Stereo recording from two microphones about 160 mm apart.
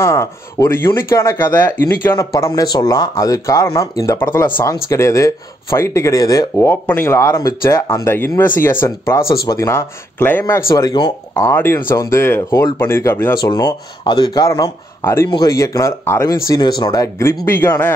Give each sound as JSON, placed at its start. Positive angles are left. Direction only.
{"t": 0.0, "sound": "speech", "side_deg": 20}